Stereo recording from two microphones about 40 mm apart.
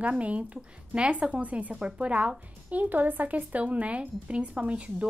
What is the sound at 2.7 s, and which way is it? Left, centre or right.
A woman's voice, right.